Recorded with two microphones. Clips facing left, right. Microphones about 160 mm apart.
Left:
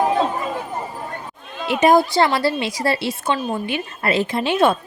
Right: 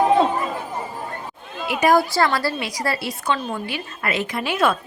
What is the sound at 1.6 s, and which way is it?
A woman's voice, 25° left (ahead or behind).